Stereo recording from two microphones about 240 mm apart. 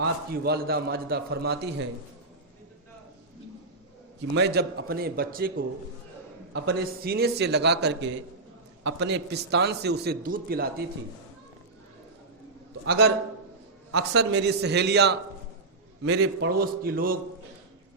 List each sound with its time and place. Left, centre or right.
0.0 s a man's voice: right
4.4 s a man's voice: right
12.8 s a man's voice: right
13.9 s a man's voice: right